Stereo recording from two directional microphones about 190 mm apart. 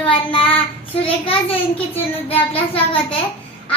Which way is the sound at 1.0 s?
30° left (ahead or behind).